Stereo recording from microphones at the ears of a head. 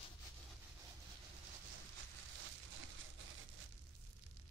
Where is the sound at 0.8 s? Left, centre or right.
Right.